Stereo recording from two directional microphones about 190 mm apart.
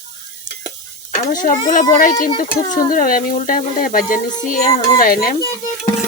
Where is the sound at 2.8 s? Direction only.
45° left (ahead or behind).